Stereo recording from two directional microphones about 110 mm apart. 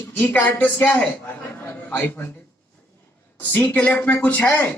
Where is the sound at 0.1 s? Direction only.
20° left (ahead or behind).